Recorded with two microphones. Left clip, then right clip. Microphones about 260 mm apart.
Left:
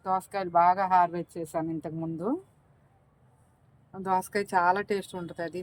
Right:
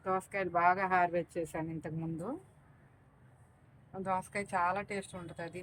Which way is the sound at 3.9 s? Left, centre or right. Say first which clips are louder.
Left 8 dB; left.